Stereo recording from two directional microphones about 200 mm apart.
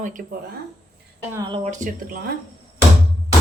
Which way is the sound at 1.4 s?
20° right (ahead or behind).